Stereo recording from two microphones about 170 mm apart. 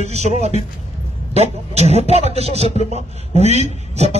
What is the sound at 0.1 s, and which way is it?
A man's voice, 40° right (ahead or behind).